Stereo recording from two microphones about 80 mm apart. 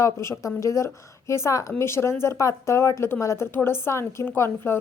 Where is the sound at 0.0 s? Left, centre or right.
Left.